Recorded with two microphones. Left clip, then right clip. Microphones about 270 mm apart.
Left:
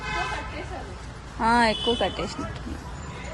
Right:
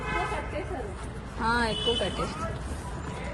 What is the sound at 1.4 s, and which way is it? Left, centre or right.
Speech, left.